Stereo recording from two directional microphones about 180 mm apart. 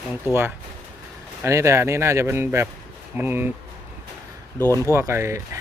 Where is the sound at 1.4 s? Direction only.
15° right (ahead or behind).